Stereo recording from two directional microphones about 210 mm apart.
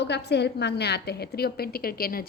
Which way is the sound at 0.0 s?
55° left (ahead or behind).